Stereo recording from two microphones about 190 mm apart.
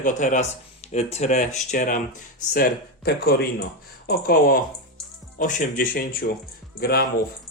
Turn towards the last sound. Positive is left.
turn(degrees=55)  # may be behind; listen again after turning